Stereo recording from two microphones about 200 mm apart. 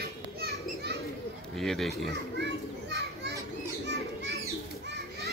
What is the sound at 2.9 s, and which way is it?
Children playing, 55° right (ahead or behind).